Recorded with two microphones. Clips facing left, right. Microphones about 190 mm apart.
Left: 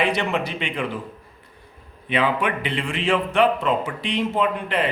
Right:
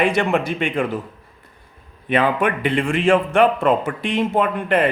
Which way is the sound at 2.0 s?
50° right (ahead or behind).